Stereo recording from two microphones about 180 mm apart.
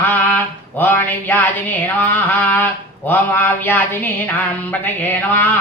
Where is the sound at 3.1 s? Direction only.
10° left (ahead or behind).